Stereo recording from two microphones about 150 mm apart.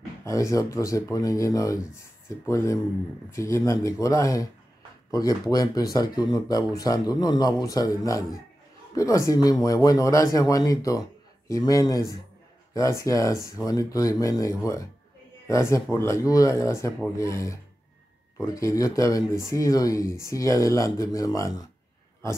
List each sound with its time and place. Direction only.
0.2 s speech: 20° left (ahead or behind)